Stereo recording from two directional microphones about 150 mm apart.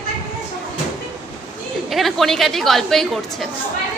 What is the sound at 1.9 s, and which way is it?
A woman's voice, centre (ahead or behind).